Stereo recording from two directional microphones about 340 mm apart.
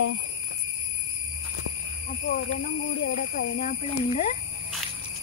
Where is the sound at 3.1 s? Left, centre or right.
Left.